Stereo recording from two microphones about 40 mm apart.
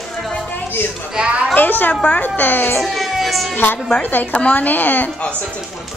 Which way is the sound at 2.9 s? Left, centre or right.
Centre.